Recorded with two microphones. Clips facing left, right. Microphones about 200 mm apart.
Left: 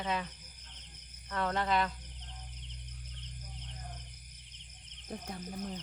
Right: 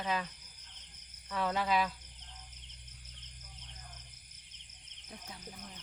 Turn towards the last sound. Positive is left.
turn(degrees=55)  # may be behind; listen again after turning